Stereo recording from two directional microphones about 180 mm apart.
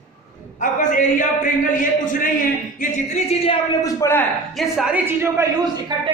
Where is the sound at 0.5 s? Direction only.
45° left (ahead or behind).